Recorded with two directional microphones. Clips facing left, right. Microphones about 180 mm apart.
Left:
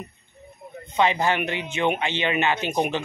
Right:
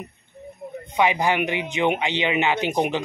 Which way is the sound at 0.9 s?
15° right (ahead or behind).